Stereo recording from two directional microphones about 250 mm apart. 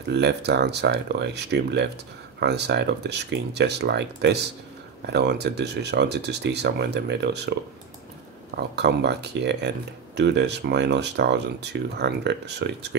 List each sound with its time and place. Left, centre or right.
0.1 s speech: right
8.5 s speech: right